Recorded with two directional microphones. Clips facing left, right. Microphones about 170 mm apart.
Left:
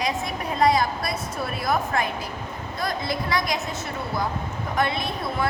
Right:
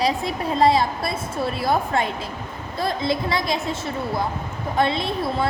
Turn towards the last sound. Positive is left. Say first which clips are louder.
# right 3 dB
turn(degrees=-25)  # may be behind; listen again after turning